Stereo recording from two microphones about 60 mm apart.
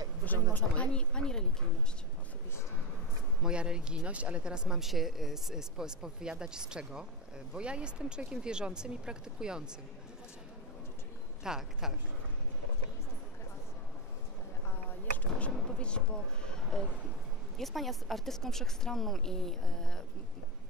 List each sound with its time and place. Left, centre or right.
0.2 s speech: left
0.9 s speech: centre
3.4 s speech: centre
11.4 s speech: centre
15.1 s a sound: left
17.6 s a woman's voice: centre